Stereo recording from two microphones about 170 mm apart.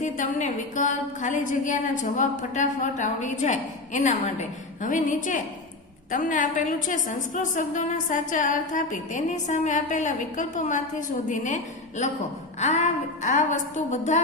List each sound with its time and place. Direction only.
0.0 s a woman's voice: 45° left (ahead or behind)